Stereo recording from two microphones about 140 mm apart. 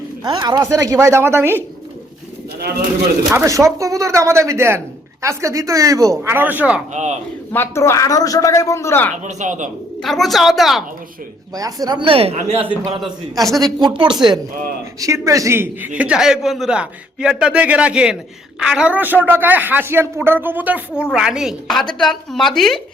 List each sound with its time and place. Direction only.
0.2 s speech: 30° right (ahead or behind)
3.3 s speech: 20° right (ahead or behind)
6.9 s speech: 55° right (ahead or behind)
7.5 s a man's voice: 15° left (ahead or behind)
9.2 s speech: 60° right (ahead or behind)
10.0 s a woman's voice: centre (ahead or behind)
11.5 s speech: 25° right (ahead or behind); by 12.5 s 45° right (ahead or behind)
13.6 s a man's voice: 30° right (ahead or behind); by 22.8 s centre (ahead or behind)